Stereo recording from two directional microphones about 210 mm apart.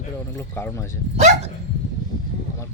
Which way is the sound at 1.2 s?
35° right (ahead or behind).